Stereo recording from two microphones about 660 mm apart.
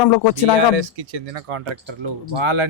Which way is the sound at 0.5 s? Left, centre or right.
Right.